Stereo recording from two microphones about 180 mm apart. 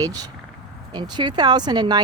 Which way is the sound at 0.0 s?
20° right (ahead or behind).